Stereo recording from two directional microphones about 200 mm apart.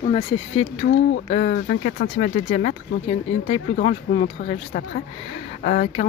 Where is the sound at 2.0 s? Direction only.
40° left (ahead or behind).